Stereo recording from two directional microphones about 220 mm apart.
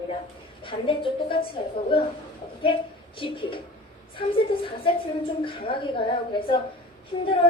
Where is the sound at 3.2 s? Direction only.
25° left (ahead or behind).